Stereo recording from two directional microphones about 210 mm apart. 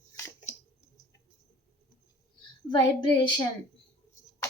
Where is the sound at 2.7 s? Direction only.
20° left (ahead or behind).